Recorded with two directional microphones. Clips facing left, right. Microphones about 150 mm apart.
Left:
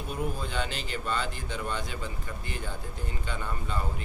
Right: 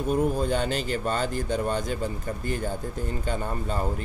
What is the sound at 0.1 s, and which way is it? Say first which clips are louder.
Speech: right 9 dB; 40° right (ahead or behind).